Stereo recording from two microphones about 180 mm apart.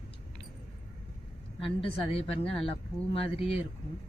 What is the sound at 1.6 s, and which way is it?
A woman's voice, 30° left (ahead or behind).